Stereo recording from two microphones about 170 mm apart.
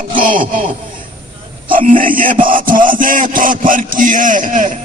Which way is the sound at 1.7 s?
55° right (ahead or behind).